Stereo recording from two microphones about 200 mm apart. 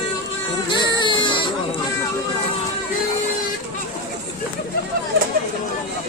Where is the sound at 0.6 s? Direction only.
25° left (ahead or behind).